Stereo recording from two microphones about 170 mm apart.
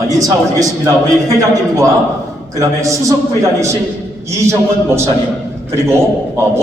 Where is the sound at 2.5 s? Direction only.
20° right (ahead or behind).